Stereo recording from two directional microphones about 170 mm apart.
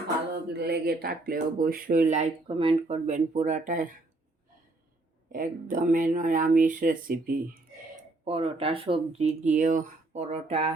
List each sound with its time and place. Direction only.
0.5 s speech: 70° right (ahead or behind)
2.0 s speech: 45° right (ahead or behind)
5.3 s speech: 50° right (ahead or behind)
8.2 s speech: 35° right (ahead or behind)